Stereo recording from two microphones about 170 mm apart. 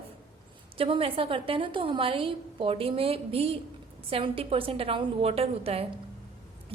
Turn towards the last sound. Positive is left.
turn(degrees=-35)  # may be behind; listen again after turning